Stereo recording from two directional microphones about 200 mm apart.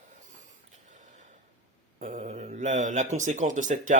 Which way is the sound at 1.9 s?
40° right (ahead or behind).